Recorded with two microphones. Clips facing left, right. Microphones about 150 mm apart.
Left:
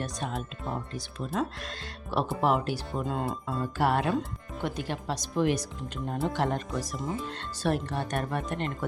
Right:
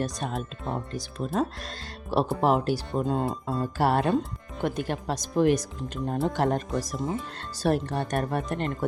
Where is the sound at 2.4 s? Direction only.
40° right (ahead or behind).